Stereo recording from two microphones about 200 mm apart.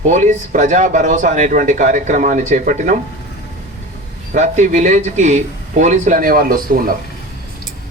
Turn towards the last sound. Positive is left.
turn(degrees=-45)  # may be behind; listen again after turning